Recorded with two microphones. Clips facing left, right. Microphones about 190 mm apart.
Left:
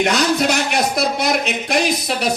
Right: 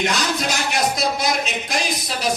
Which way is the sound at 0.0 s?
60° left (ahead or behind).